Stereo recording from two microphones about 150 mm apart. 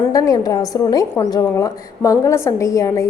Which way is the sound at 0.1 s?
25° left (ahead or behind).